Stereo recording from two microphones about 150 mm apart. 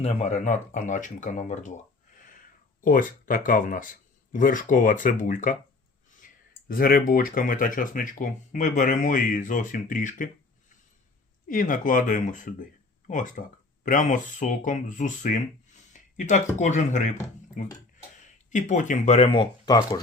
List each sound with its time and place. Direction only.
0.0 s speech: 45° left (ahead or behind); by 5.5 s 60° left (ahead or behind)
6.2 s clicking: 60° left (ahead or behind)
6.7 s speech: 75° left (ahead or behind); by 10.2 s 60° left (ahead or behind)
11.4 s speech: 65° left (ahead or behind); by 20.0 s 25° left (ahead or behind)